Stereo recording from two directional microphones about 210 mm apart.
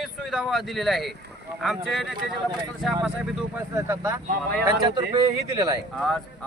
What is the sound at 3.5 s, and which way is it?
Speech, 15° right (ahead or behind).